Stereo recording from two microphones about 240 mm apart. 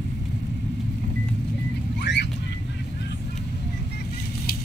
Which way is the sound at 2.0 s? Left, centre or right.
Left.